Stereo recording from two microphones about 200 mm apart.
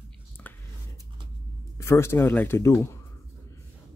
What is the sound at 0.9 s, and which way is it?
Vehicle, 20° right (ahead or behind).